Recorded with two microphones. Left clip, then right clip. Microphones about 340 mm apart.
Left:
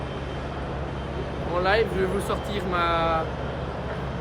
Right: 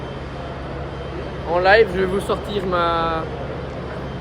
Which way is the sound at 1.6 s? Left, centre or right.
Right.